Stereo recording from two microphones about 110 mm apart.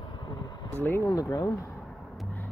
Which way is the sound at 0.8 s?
25° left (ahead or behind).